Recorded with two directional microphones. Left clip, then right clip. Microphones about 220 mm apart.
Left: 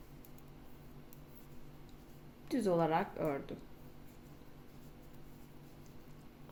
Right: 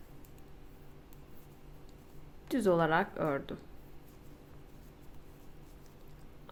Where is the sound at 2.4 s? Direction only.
20° right (ahead or behind).